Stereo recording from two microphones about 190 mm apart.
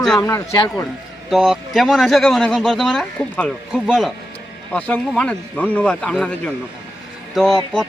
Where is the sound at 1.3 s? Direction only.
Centre (ahead or behind).